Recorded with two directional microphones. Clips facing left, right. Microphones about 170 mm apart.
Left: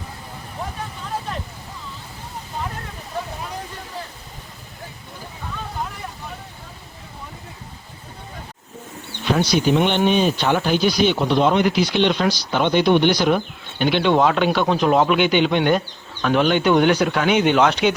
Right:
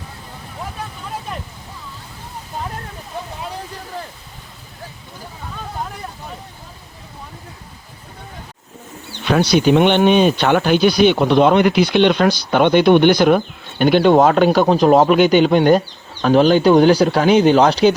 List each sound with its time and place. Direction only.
9.2 s speech: 70° right (ahead or behind); by 17.9 s 35° right (ahead or behind)